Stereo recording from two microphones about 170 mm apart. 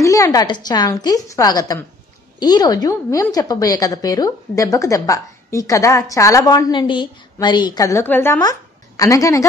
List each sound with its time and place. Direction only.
0.0 s a woman's voice: 20° left (ahead or behind)